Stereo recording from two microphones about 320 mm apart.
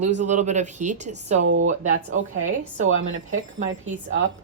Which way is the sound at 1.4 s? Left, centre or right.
Right.